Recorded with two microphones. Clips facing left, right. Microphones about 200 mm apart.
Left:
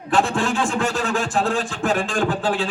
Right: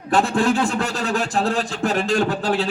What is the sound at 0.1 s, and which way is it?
A man's voice, 35° right (ahead or behind).